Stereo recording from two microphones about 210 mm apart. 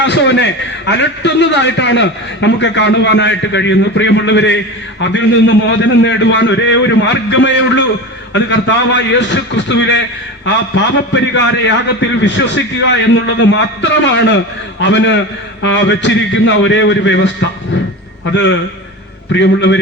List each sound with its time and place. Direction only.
0.0 s a man's voice: 55° left (ahead or behind)
19.3 s a man's voice: 60° left (ahead or behind)